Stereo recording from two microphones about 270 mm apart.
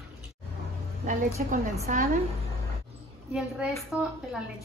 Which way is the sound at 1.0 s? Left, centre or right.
Right.